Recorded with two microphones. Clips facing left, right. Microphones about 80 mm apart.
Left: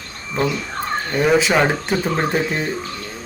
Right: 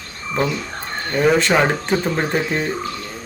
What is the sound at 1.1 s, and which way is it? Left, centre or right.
Speech, centre.